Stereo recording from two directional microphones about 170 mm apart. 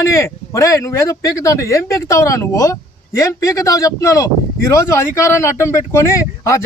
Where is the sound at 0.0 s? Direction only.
15° left (ahead or behind).